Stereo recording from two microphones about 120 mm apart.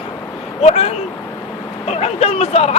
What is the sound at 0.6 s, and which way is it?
Speech, 60° left (ahead or behind).